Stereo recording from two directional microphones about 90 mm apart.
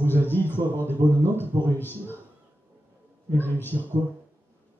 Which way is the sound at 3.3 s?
20° left (ahead or behind).